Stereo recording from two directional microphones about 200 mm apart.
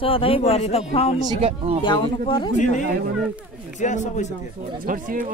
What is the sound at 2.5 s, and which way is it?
Speech, 40° left (ahead or behind).